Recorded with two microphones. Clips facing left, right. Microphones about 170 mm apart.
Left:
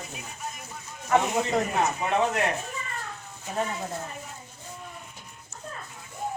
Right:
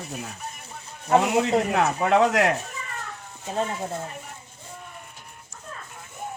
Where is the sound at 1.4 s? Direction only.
80° right.